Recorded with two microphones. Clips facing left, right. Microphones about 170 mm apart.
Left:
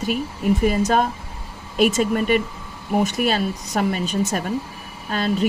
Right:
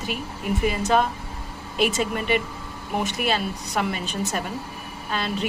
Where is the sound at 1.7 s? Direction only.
45° left (ahead or behind).